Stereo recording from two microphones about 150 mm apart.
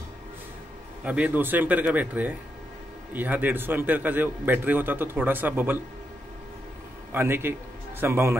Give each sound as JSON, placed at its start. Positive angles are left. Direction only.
{"t": 1.0, "sound": "a man's voice", "side_deg": -10}
{"t": 7.1, "sound": "a man's voice", "side_deg": -15}